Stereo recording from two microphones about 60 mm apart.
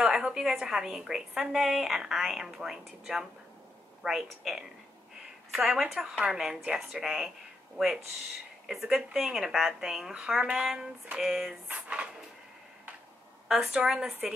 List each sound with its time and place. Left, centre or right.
0.0 s a woman's voice: centre
11.6 s speech: right
13.5 s a woman's voice: centre
13.7 s speech: centre